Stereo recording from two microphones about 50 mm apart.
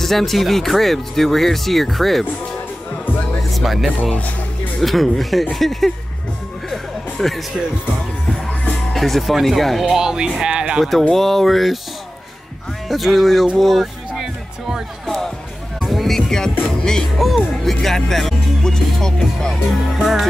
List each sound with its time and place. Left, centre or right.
0.0 s speech: centre
3.4 s speech: centre
6.7 s music: centre
8.9 s speech: centre
10.8 s speech: centre
12.8 s speech: centre
14.1 s music: centre
15.0 s music: centre
17.6 s speech: centre
20.0 s speech: centre